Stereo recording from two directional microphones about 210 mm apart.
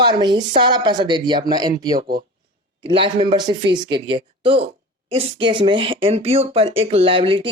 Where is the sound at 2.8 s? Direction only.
25° right (ahead or behind).